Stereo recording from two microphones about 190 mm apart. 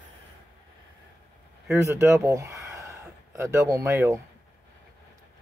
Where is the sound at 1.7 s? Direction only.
15° right (ahead or behind).